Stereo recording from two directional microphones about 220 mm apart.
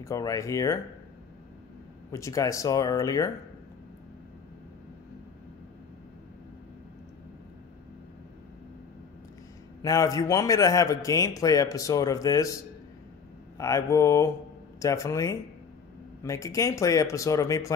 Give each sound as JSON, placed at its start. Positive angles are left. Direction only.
{"t": 0.0, "sound": "speech", "side_deg": 15}
{"t": 2.1, "sound": "speech", "side_deg": 15}
{"t": 9.8, "sound": "speech", "side_deg": 15}
{"t": 13.6, "sound": "speech", "side_deg": 15}